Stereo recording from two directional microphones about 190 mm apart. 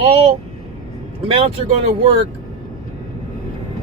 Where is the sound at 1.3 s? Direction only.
30° right (ahead or behind).